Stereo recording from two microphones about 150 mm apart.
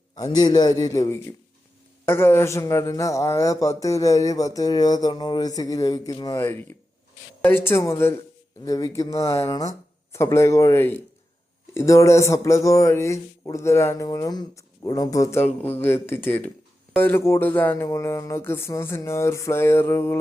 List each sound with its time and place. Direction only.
0.2 s a man's voice: 30° left (ahead or behind)